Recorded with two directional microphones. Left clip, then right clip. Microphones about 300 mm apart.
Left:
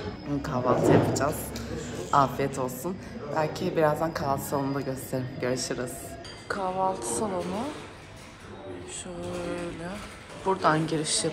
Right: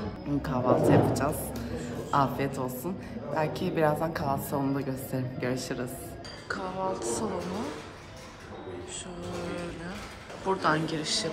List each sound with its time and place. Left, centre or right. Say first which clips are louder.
0.4 s a woman's voice: even; centre
10.4 s a woman's voice: left 3 dB; centre